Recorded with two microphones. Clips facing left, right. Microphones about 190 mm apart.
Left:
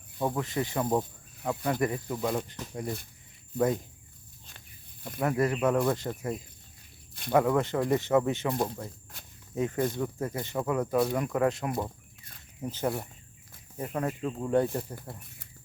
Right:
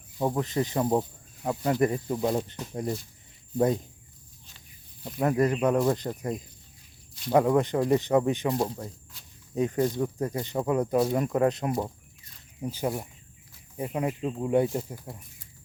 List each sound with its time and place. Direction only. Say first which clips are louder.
0.2 s speech: right 3 dB; 20° right (ahead or behind)
5.2 s speech: right 3 dB; 20° right (ahead or behind)
8.5 s speech: right 2 dB; 5° right (ahead or behind)
9.1 s snake: left 3 dB; 55° left (ahead or behind)
9.6 s speech: right 3 dB; 20° right (ahead or behind)
12.6 s speech: right 1 dB; 10° right (ahead or behind)